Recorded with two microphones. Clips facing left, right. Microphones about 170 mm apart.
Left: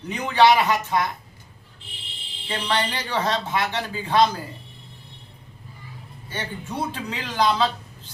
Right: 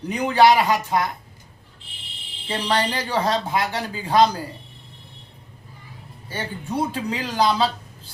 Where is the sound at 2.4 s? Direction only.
35° right (ahead or behind).